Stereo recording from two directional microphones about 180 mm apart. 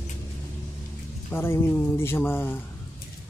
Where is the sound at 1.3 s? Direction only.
15° left (ahead or behind).